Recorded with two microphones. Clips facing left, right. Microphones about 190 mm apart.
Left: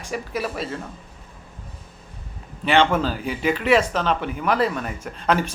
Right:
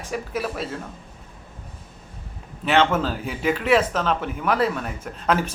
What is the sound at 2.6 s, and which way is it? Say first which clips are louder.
A man's voice: left 1 dB; 5° right (ahead or behind).